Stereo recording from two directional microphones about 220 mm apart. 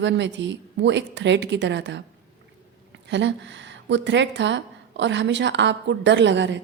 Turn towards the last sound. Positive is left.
turn(degrees=-55)  # may be behind; listen again after turning